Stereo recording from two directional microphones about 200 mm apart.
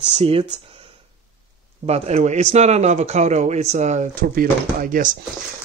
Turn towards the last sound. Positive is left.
turn(degrees=-40)  # may be behind; listen again after turning